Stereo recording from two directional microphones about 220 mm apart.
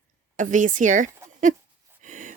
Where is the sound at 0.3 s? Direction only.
35° right (ahead or behind).